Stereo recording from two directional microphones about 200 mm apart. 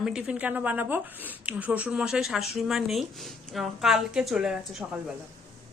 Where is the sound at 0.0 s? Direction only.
5° right (ahead or behind).